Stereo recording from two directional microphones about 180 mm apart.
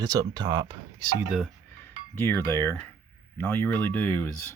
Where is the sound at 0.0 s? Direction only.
20° right (ahead or behind).